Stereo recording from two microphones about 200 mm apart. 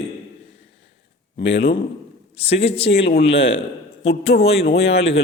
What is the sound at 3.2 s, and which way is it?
A man's voice, 30° left (ahead or behind).